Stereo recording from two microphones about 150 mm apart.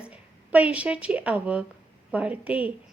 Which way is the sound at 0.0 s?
10° right (ahead or behind).